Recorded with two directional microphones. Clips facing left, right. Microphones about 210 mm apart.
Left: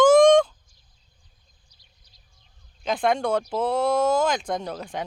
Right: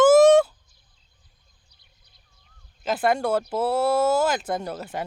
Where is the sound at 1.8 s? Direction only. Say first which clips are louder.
Even; 60° right (ahead or behind).